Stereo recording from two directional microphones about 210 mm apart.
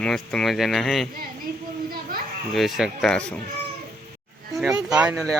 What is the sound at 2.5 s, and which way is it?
Speech, centre (ahead or behind).